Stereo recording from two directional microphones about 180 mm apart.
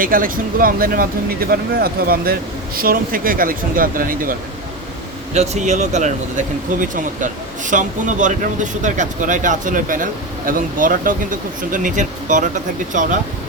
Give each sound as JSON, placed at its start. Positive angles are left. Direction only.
{"t": 0.0, "sound": "speech", "side_deg": -50}
{"t": 5.3, "sound": "speech", "side_deg": -40}